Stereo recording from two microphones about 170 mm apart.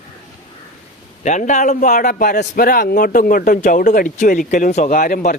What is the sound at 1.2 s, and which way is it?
A man's voice, 45° left (ahead or behind).